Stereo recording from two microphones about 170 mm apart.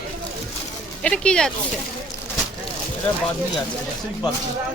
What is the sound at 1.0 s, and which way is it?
Speech, 5° left (ahead or behind).